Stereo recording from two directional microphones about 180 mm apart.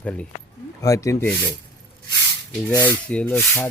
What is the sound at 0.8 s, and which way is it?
Speech, 15° left (ahead or behind).